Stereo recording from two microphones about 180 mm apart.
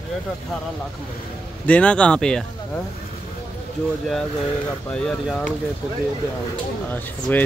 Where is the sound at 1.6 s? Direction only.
5° left (ahead or behind).